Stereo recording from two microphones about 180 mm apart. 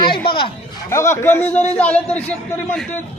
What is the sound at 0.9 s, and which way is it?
Speech, 15° left (ahead or behind).